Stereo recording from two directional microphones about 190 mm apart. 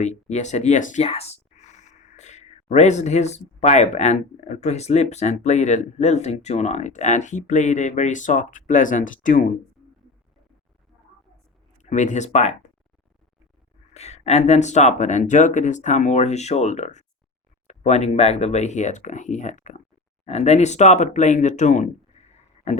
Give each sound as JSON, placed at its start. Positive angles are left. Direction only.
{"t": 0.0, "sound": "speech", "side_deg": 35}
{"t": 11.8, "sound": "speech", "side_deg": 40}
{"t": 13.9, "sound": "speech", "side_deg": 35}